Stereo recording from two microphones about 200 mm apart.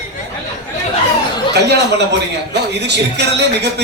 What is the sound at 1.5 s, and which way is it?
Speech, 55° right (ahead or behind).